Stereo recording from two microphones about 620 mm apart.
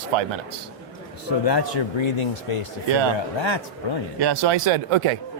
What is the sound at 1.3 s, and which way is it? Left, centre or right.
Speech, left.